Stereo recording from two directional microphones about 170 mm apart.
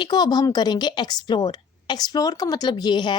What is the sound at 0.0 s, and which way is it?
Speech, 25° left (ahead or behind).